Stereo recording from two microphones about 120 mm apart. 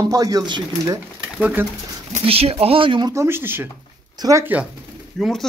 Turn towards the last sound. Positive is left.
turn(degrees=5)  # may be behind; listen again after turning